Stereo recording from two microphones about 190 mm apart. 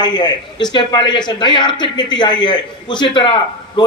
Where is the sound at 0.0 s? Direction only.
20° left (ahead or behind).